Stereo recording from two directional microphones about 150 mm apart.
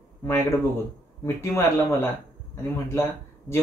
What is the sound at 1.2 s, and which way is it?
A man's voice, 20° left (ahead or behind).